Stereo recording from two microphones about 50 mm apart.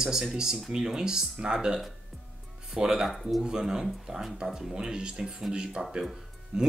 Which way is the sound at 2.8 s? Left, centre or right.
Centre.